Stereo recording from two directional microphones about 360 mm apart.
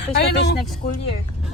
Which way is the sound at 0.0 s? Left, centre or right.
Left.